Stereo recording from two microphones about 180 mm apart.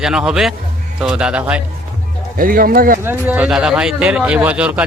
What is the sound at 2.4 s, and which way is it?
Speech, 50° right (ahead or behind).